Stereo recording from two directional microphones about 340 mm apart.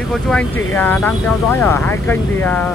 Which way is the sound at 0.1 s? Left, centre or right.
Centre.